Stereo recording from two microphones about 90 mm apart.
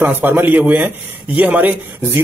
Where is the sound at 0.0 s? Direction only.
20° right (ahead or behind).